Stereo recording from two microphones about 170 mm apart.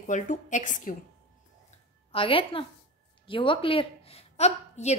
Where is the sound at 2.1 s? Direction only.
30° left (ahead or behind).